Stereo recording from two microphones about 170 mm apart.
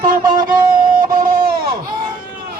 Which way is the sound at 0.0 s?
55° right (ahead or behind).